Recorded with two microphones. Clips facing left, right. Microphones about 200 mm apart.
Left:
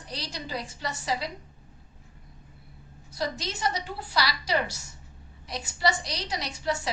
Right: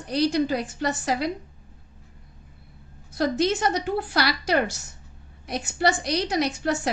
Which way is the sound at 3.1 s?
55° right (ahead or behind).